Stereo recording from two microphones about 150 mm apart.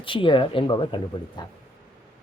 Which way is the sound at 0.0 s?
35° left (ahead or behind).